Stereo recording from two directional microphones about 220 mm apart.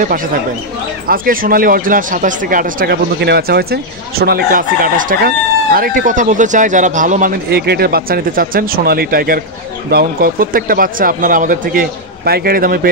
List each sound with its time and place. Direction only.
0.0 s speech: 40° right (ahead or behind)